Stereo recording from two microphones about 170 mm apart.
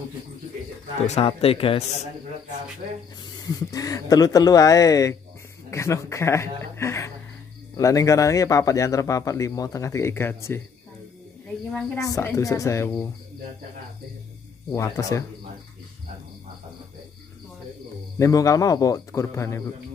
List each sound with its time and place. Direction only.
1.0 s speech: 35° left (ahead or behind)
3.3 s speech: 20° left (ahead or behind)
12.0 s speech: 20° left (ahead or behind)
14.7 s speech: 20° left (ahead or behind)
18.2 s speech: 20° left (ahead or behind)